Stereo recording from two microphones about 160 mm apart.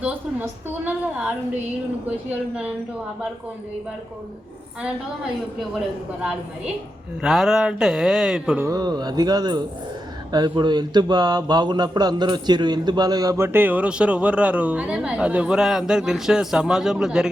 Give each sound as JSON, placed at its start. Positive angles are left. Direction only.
{"t": 0.0, "sound": "speech", "side_deg": -10}
{"t": 7.2, "sound": "speech", "side_deg": -5}
{"t": 8.6, "sound": "speech", "side_deg": -25}